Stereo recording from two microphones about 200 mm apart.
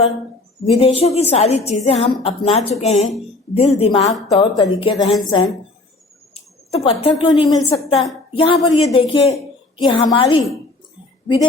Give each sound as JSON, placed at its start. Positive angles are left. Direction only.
{"t": 0.6, "sound": "a woman's voice", "side_deg": 30}
{"t": 6.7, "sound": "a woman's voice", "side_deg": 30}